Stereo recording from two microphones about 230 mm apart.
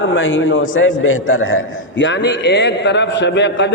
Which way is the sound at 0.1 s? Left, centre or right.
Left.